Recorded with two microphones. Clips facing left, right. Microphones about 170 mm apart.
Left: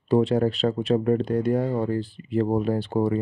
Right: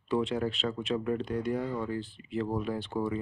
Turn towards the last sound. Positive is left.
turn(degrees=40)  # may be behind; listen again after turning